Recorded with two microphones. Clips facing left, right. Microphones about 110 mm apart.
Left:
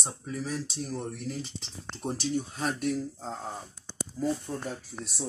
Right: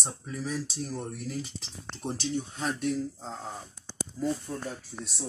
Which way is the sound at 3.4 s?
20° left (ahead or behind).